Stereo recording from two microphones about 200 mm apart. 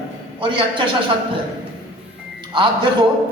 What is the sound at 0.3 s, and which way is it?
Speech, 25° right (ahead or behind).